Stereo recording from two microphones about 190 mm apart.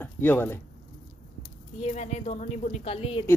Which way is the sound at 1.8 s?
35° left (ahead or behind).